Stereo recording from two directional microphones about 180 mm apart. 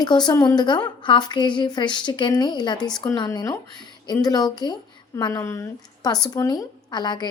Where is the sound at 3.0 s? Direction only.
20° left (ahead or behind).